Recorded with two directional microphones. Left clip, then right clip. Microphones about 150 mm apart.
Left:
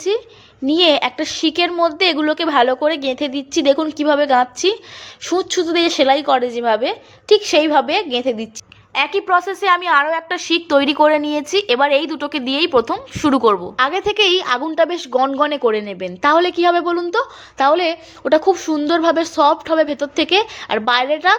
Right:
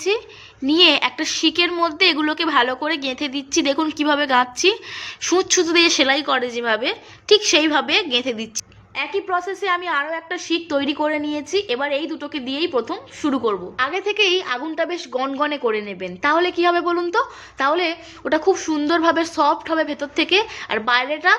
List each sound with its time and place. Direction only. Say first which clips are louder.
0.7 s a woman's voice: left 1 dB; 30° left (ahead or behind)
9.0 s a woman's voice: left 7 dB; 40° left (ahead or behind)